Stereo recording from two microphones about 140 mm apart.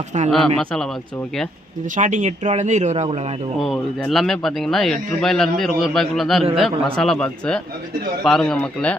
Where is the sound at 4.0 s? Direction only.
Centre (ahead or behind).